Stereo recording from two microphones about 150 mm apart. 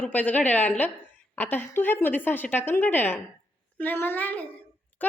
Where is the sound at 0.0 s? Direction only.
10° left (ahead or behind).